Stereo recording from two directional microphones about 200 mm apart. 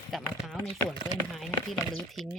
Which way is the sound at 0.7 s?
Centre (ahead or behind).